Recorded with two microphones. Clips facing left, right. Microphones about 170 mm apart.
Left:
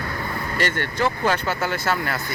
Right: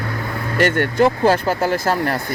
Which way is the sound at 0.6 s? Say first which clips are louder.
Right 9 dB; 55° right (ahead or behind).